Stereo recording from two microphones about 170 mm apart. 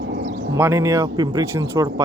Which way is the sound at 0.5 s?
15° right (ahead or behind).